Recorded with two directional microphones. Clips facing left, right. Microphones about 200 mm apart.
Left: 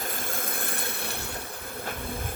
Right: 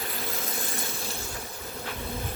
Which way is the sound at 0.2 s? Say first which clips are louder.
Even; 50° left (ahead or behind).